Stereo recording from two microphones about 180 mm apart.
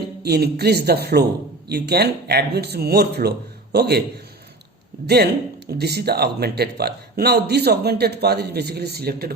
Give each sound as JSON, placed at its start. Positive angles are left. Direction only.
{"t": 0.2, "sound": "speech", "side_deg": -65}
{"t": 5.0, "sound": "speech", "side_deg": -65}